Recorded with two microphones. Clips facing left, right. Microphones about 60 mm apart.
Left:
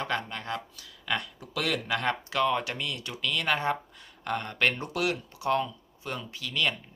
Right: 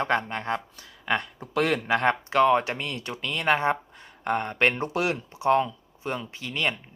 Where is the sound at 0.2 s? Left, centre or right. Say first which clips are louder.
Right 5 dB; right.